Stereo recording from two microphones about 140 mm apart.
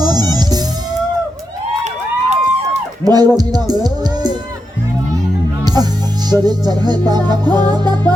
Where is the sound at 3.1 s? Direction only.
30° right (ahead or behind).